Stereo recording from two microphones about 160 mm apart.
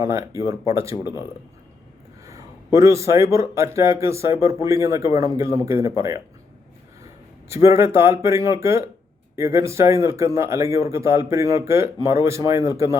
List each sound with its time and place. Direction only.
0.0 s speech: 20° right (ahead or behind)
2.7 s speech: 20° right (ahead or behind)
7.5 s speech: 15° right (ahead or behind)